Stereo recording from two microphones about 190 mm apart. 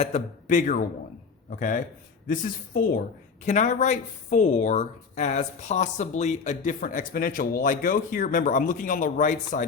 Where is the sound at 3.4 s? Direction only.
40° left (ahead or behind).